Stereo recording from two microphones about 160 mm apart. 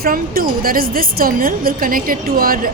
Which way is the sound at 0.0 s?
65° right (ahead or behind).